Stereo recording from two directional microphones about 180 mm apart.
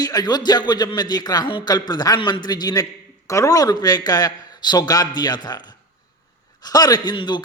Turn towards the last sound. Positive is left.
turn(degrees=25)  # may be behind; listen again after turning